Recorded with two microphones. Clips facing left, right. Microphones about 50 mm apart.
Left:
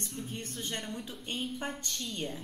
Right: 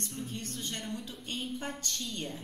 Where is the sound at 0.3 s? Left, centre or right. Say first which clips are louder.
Left 1 dB; centre.